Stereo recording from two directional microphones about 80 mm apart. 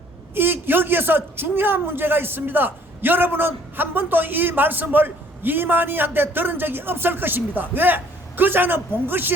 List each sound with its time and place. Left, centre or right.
0.3 s a man's voice: right